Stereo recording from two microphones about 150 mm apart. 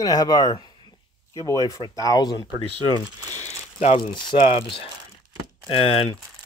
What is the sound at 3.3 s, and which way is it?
Crumpling, 45° left (ahead or behind).